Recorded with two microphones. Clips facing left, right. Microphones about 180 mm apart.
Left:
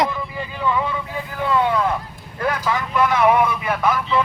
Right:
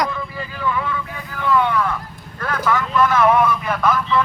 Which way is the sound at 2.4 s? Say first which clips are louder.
Right 1 dB; 15° left (ahead or behind).